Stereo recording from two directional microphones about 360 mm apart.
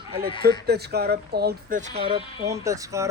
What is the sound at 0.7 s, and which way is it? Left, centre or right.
Speech, right.